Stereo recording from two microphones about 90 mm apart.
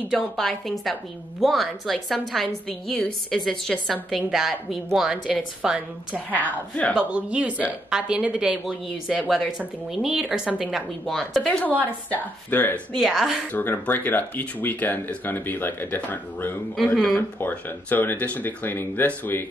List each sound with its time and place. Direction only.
0.4 s a woman's voice: 5° left (ahead or behind)
6.3 s a woman's voice: 15° left (ahead or behind)
7.0 s a woman's voice: 10° right (ahead or behind)
11.1 s a woman's voice: 5° left (ahead or behind); by 12.8 s 20° left (ahead or behind)
12.9 s a woman's voice: centre (ahead or behind)
13.5 s speech: 20° left (ahead or behind)
16.7 s a woman's voice: 5° left (ahead or behind)
17.4 s speech: 20° left (ahead or behind)